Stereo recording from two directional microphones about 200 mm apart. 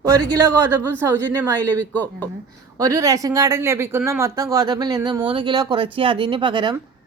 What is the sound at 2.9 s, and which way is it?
Speech, 15° right (ahead or behind).